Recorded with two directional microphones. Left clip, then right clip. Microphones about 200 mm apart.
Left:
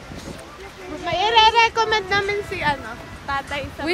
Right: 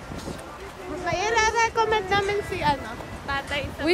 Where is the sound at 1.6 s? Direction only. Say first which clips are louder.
Left 5 dB; 45° left (ahead or behind).